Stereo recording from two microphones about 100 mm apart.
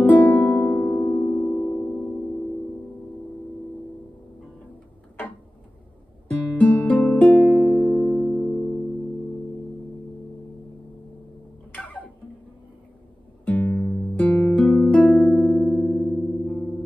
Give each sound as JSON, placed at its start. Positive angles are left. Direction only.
{"t": 0.1, "sound": "music", "side_deg": 15}
{"t": 6.4, "sound": "music", "side_deg": 15}
{"t": 7.8, "sound": "music", "side_deg": 20}
{"t": 13.5, "sound": "music", "side_deg": 15}
{"t": 15.0, "sound": "music", "side_deg": 0}